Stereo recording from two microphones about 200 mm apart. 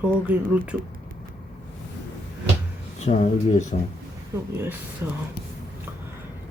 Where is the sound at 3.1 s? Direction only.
35° left (ahead or behind).